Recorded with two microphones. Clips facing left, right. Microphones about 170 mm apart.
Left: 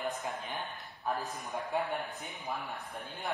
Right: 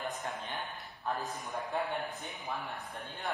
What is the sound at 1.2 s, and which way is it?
Speech, centre (ahead or behind).